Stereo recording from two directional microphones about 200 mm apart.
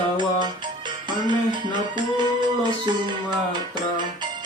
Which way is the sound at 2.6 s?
20° right (ahead or behind).